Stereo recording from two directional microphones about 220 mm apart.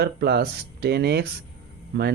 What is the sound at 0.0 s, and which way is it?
Speech, 50° right (ahead or behind).